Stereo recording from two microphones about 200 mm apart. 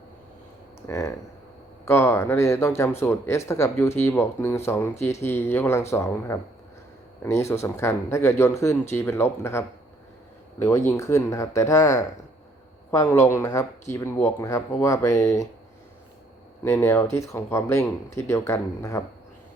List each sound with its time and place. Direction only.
0.8 s speech: 15° left (ahead or behind)
16.6 s speech: 10° left (ahead or behind)